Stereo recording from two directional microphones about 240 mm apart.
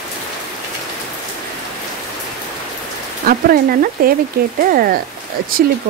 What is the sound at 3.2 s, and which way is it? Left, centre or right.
Speech, right.